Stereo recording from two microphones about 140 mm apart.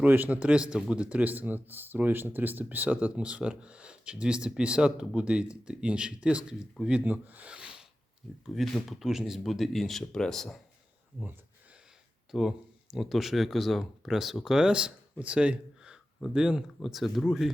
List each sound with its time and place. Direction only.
0.0 s a man's voice: 10° right (ahead or behind)
12.3 s speech: 5° right (ahead or behind)